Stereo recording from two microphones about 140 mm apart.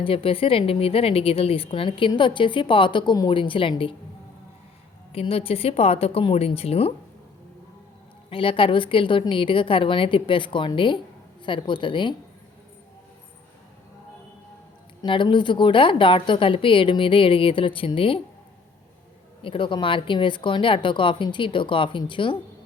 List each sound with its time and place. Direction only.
0.0 s a woman's voice: 40° left (ahead or behind)
5.1 s speech: 45° left (ahead or behind)
8.3 s a woman's voice: 40° left (ahead or behind)
15.0 s a woman's voice: 35° left (ahead or behind)
19.4 s a woman's voice: 40° left (ahead or behind)